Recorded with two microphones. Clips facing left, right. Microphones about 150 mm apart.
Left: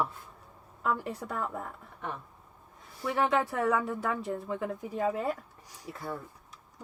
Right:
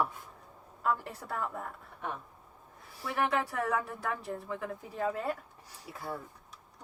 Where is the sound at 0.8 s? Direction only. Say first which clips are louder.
Left 1 dB; 20° left (ahead or behind).